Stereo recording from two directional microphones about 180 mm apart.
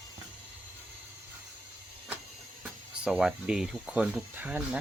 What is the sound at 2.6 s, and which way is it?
Speech, 5° right (ahead or behind).